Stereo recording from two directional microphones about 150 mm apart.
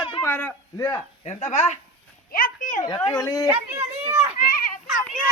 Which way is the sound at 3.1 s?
25° left (ahead or behind).